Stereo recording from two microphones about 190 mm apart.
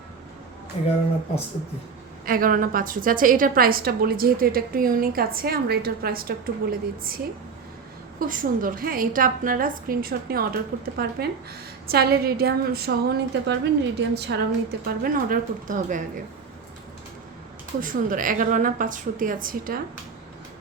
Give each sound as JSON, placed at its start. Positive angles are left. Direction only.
{"t": 0.7, "sound": "speech", "side_deg": 30}
{"t": 2.2, "sound": "a woman's voice", "side_deg": -50}
{"t": 8.3, "sound": "a woman's voice", "side_deg": -45}
{"t": 15.0, "sound": "a woman's voice", "side_deg": -45}
{"t": 17.7, "sound": "a woman's voice", "side_deg": -45}